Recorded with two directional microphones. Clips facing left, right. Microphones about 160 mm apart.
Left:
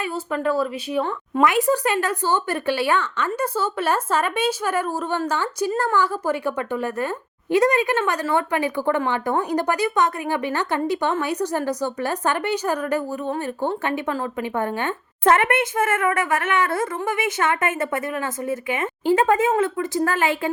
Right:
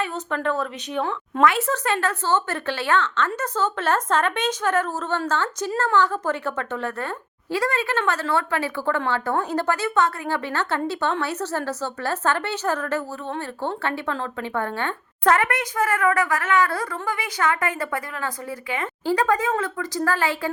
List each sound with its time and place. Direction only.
0.0 s a woman's voice: 5° left (ahead or behind)